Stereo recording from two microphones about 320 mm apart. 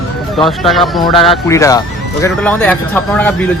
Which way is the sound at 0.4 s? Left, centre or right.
Centre.